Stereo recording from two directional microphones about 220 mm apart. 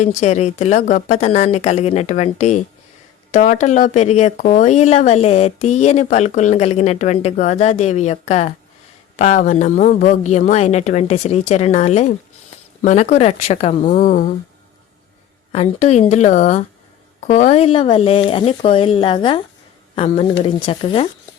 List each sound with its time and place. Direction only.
0.0 s speech: 30° left (ahead or behind)
15.5 s speech: 30° left (ahead or behind)
20.6 s speech: 25° left (ahead or behind)